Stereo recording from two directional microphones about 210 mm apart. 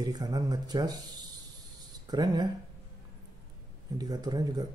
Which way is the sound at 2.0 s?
20° right (ahead or behind).